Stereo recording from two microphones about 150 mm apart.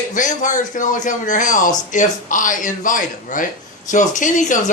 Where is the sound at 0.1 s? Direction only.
55° left (ahead or behind).